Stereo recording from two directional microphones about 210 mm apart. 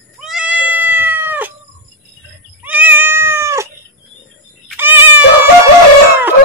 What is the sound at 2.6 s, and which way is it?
Cat, 10° right (ahead or behind).